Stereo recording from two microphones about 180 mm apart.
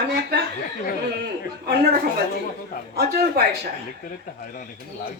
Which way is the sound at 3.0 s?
60° right (ahead or behind).